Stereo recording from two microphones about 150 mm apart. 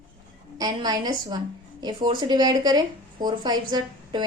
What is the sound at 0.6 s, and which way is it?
Speech, 25° right (ahead or behind).